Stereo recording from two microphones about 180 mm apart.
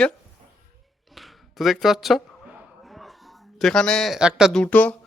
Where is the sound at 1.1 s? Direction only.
Centre (ahead or behind).